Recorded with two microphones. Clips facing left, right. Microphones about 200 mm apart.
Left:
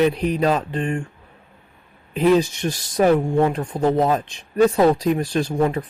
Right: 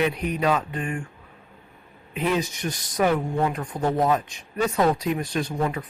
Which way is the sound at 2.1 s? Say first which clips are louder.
Left 8 dB; 30° left (ahead or behind).